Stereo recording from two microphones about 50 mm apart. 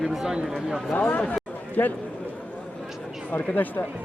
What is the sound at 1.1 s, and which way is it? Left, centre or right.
Speech, left.